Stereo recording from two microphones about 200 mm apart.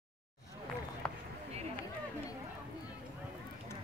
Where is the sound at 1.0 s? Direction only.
5° left (ahead or behind).